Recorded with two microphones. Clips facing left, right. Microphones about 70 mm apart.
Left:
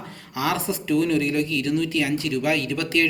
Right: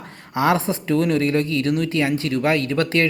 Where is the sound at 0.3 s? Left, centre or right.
Right.